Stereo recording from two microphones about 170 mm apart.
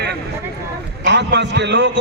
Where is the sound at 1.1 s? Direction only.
90° right.